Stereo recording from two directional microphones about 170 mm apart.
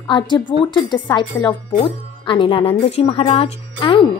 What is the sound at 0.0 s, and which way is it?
Speech, 25° left (ahead or behind).